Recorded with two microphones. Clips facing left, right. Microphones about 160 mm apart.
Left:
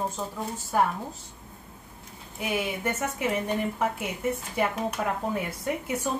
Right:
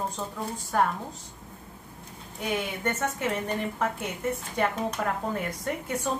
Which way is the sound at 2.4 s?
5° left (ahead or behind).